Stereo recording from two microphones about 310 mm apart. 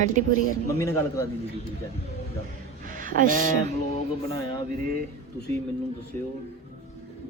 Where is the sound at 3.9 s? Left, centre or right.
Centre.